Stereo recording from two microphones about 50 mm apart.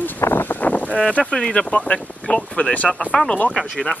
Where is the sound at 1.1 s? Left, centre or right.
Left.